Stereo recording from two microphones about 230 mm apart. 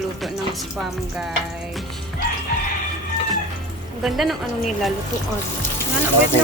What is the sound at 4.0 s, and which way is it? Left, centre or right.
Speech, centre.